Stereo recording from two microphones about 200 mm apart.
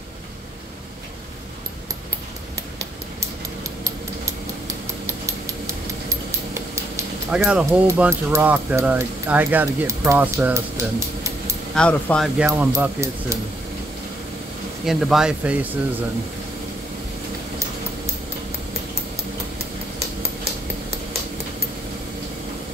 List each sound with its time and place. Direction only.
5.0 s a sound: 15° right (ahead or behind)
6.0 s speech: 15° right (ahead or behind)
11.7 s speech: 5° left (ahead or behind)
12.4 s speech: 10° right (ahead or behind)
14.9 s speech: centre (ahead or behind)